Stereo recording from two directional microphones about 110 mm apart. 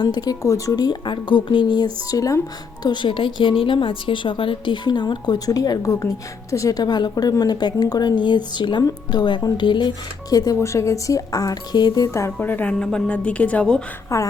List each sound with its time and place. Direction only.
0.0 s a woman's voice: 35° left (ahead or behind)
2.8 s a woman's voice: 45° left (ahead or behind)
12.0 s a woman's voice: 25° left (ahead or behind); by 13.8 s 10° left (ahead or behind)
14.1 s speech: 25° left (ahead or behind)